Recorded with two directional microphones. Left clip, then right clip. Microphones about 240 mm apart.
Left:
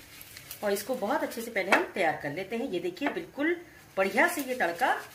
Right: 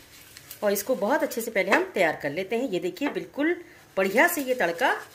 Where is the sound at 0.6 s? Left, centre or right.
Right.